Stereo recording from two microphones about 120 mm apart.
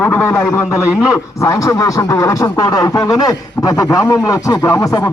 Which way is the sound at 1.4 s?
30° left (ahead or behind).